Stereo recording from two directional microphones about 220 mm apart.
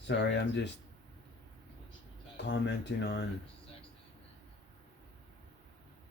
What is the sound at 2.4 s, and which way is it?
Speech, 50° left (ahead or behind).